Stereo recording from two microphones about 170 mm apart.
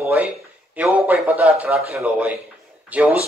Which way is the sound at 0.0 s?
10° right (ahead or behind).